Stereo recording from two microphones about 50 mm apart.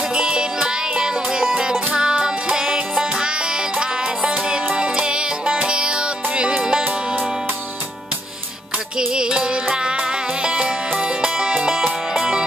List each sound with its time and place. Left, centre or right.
0.1 s music: centre
8.9 s music: centre